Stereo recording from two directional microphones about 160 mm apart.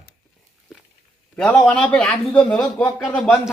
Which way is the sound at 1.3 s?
5° left (ahead or behind).